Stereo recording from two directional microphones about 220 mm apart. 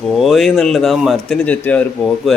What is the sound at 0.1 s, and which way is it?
Speech, centre (ahead or behind).